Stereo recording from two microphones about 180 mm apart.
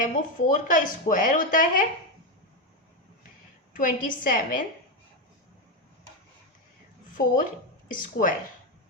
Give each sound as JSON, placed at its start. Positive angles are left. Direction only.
{"t": 0.0, "sound": "a woman's voice", "side_deg": 45}
{"t": 3.7, "sound": "a woman's voice", "side_deg": 50}
{"t": 7.1, "sound": "a woman's voice", "side_deg": 50}